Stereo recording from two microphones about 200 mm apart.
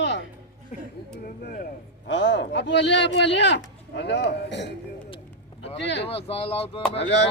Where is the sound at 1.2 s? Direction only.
50° left (ahead or behind).